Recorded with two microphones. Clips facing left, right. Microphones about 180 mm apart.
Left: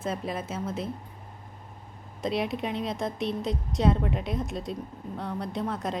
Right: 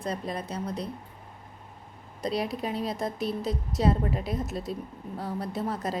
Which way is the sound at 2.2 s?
Centre (ahead or behind).